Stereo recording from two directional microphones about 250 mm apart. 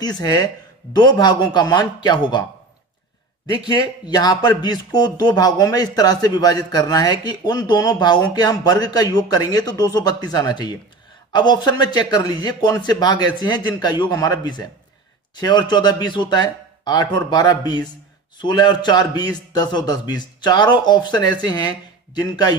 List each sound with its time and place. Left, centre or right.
0.0 s speech: centre
3.4 s speech: centre